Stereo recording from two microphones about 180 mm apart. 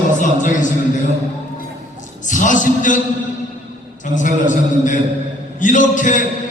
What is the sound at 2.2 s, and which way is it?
Speech, 45° left (ahead or behind).